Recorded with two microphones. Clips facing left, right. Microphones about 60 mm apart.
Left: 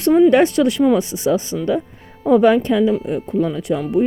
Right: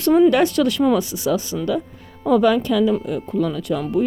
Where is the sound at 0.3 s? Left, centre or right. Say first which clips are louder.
Left 3 dB; left.